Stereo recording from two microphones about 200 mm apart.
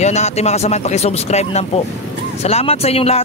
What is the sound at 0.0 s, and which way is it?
Speech, 35° left (ahead or behind).